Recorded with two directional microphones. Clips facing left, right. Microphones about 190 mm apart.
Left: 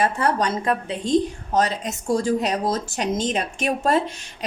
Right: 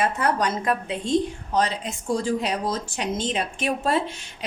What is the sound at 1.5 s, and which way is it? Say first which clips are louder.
A woman's voice: left 2 dB; 45° left (ahead or behind).